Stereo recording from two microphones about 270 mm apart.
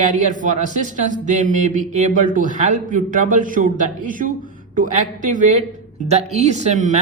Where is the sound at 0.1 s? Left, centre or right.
Right.